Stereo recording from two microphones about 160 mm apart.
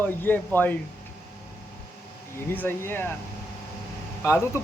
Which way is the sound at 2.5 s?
15° left (ahead or behind).